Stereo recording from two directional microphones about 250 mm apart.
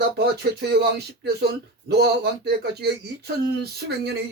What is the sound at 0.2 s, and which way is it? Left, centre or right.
Speech, right.